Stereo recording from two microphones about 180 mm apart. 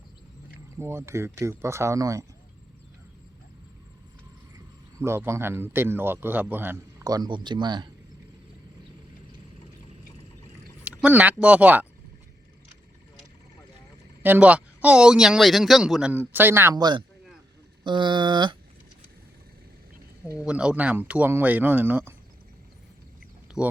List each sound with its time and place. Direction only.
0.8 s speech: 15° right (ahead or behind)
4.9 s speech: 15° right (ahead or behind)
10.8 s speech: 10° right (ahead or behind)
14.2 s speech: 10° right (ahead or behind); by 18.5 s 25° right (ahead or behind)
20.4 s speech: 5° right (ahead or behind)
23.6 s speech: 5° right (ahead or behind)